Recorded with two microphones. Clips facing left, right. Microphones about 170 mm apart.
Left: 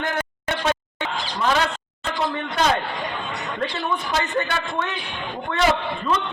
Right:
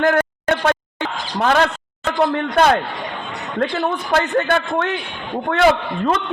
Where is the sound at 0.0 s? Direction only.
55° right (ahead or behind).